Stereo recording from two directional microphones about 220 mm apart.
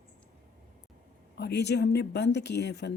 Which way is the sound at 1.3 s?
50° left (ahead or behind).